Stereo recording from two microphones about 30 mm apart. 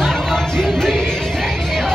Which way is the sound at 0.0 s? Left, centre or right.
Centre.